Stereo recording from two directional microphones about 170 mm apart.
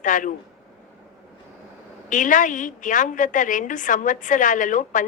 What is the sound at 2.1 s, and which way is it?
A woman's voice, 50° left (ahead or behind).